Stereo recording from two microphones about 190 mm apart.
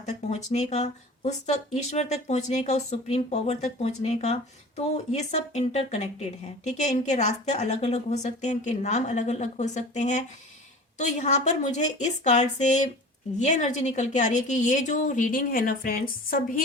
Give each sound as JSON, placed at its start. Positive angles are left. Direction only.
{"t": 0.0, "sound": "speech", "side_deg": 35}